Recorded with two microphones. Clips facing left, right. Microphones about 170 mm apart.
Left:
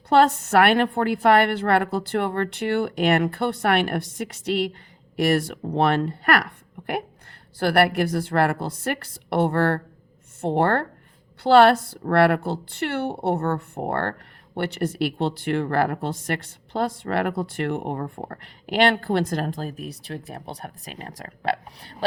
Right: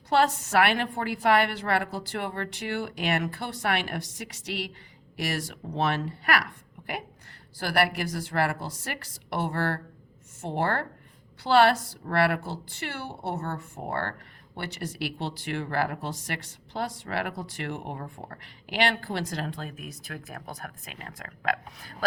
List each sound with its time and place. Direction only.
0.1 s a woman's voice: 55° left (ahead or behind); by 21.9 s 30° left (ahead or behind)